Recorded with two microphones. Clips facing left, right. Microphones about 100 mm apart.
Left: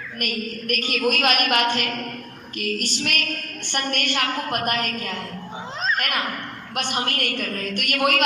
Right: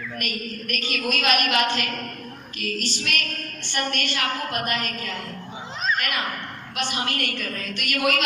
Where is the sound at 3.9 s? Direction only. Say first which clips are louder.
Left 4 dB; 50° left (ahead or behind).